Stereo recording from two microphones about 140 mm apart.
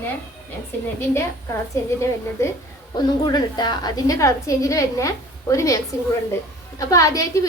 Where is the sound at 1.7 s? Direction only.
20° left (ahead or behind).